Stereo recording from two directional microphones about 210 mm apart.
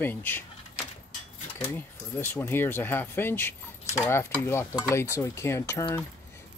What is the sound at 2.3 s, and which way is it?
Speech, 10° left (ahead or behind).